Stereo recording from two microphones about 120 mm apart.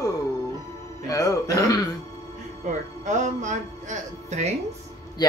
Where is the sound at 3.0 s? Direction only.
90° right; by 4.5 s 70° right (ahead or behind).